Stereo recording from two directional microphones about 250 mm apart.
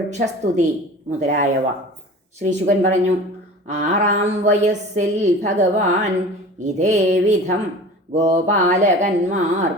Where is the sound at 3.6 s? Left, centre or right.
Right.